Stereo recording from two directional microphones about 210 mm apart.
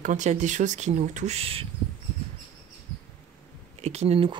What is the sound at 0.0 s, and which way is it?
Speech, 35° right (ahead or behind).